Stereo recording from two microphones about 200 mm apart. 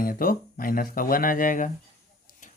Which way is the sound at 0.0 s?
45° left (ahead or behind).